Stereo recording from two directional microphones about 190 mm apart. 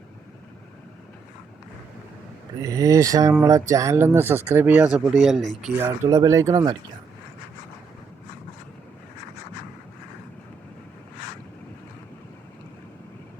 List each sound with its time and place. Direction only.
2.6 s speech: 15° right (ahead or behind); by 5.7 s centre (ahead or behind)
5.8 s speech: 15° right (ahead or behind)